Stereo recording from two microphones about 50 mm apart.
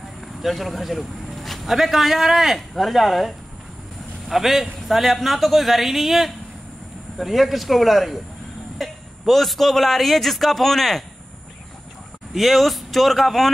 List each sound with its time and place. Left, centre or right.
0.4 s a man's voice: centre
12.4 s a man's voice: centre